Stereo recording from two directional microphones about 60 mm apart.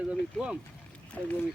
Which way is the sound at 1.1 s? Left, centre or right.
Left.